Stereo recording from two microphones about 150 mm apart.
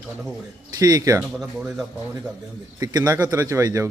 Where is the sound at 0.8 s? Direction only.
25° right (ahead or behind).